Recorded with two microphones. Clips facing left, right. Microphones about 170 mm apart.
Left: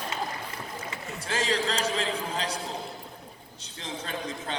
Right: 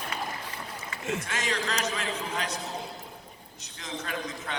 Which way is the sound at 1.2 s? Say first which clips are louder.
Left 4 dB; 30° left (ahead or behind).